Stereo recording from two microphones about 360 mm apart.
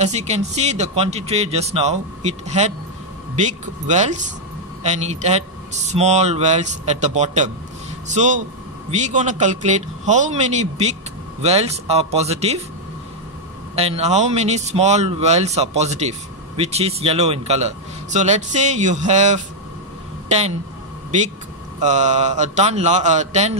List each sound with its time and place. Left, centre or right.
0.0 s a man's voice: centre
13.7 s a man's voice: centre
21.8 s a man's voice: centre